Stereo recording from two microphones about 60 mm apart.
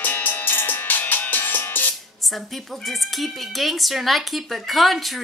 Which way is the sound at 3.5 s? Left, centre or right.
Centre.